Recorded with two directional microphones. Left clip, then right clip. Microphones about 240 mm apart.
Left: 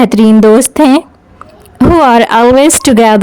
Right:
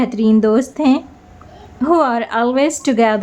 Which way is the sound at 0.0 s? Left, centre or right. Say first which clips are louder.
Left 9 dB; left.